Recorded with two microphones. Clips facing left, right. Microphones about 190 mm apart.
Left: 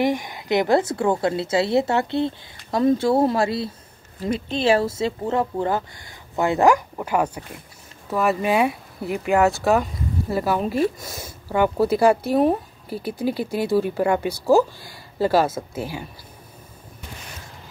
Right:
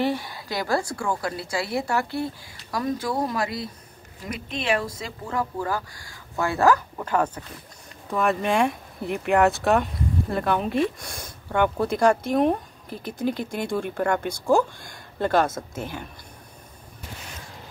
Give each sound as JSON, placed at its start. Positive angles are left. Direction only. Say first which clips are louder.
{"t": 0.0, "sound": "a woman's voice", "louder": "left 3 dB", "side_deg": 15}